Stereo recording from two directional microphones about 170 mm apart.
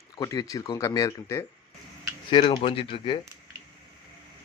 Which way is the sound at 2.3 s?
30° left (ahead or behind).